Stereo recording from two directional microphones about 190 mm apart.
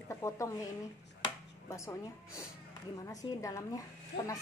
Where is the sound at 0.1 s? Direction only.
15° left (ahead or behind).